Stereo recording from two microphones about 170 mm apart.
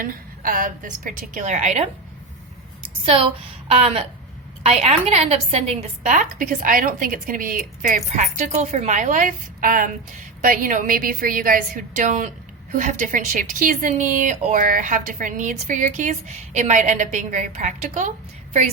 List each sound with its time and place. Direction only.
0.0 s speech: 55° right (ahead or behind)
2.8 s a woman's voice: 30° right (ahead or behind); by 18.1 s 45° right (ahead or behind)